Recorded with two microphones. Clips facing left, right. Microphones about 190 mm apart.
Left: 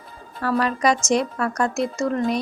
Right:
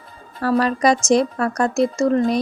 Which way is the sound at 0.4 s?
35° right (ahead or behind).